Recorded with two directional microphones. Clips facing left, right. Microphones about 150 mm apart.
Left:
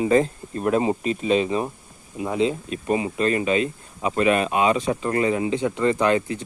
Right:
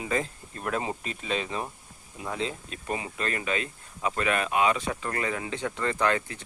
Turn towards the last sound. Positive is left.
turn(degrees=20)  # may be behind; listen again after turning